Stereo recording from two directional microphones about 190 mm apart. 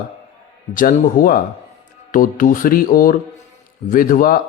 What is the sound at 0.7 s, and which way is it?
A man's voice, 45° left (ahead or behind).